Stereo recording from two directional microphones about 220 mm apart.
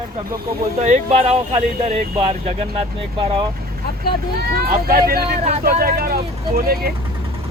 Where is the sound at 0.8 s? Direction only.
30° right (ahead or behind).